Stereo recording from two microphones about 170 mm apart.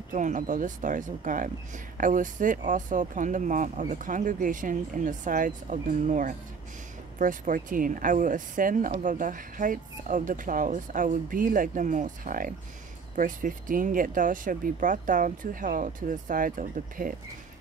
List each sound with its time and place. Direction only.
0.1 s speech: 45° right (ahead or behind)